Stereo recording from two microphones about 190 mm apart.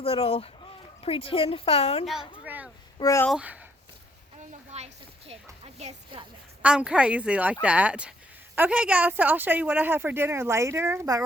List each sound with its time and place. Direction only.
0.0 s a woman's voice: 30° left (ahead or behind)
2.4 s a sound: 10° right (ahead or behind)
3.0 s speech: 15° left (ahead or behind)
3.2 s speech: 5° right (ahead or behind)
4.4 s a sound: 35° right (ahead or behind)
5.6 s speech: 30° right (ahead or behind)
6.6 s speech: 5° right (ahead or behind)